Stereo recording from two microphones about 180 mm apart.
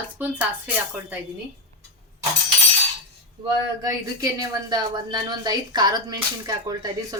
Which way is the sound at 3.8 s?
20° right (ahead or behind).